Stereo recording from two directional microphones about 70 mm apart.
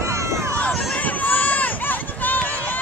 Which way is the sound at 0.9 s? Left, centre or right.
Left.